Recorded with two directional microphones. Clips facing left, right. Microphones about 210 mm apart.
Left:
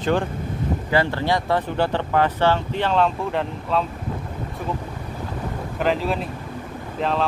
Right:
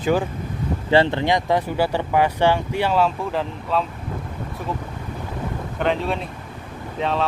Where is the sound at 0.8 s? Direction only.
25° right (ahead or behind); by 3.8 s centre (ahead or behind).